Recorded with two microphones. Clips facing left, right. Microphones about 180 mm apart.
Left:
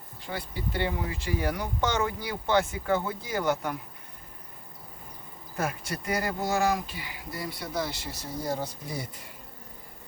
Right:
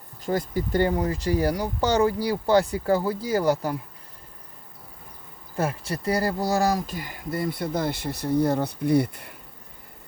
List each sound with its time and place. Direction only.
0.2 s speech: 45° right (ahead or behind)
5.5 s speech: 30° right (ahead or behind); by 9.3 s 60° right (ahead or behind)